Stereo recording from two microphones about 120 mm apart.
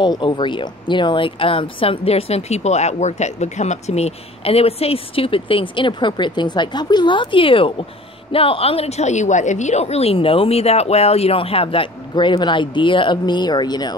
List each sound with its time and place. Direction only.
0.0 s speech: 35° left (ahead or behind)